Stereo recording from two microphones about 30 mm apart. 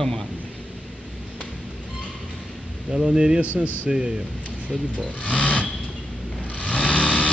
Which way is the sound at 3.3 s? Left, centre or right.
Right.